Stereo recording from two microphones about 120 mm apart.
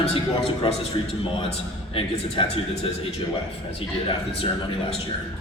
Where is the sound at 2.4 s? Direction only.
45° left (ahead or behind).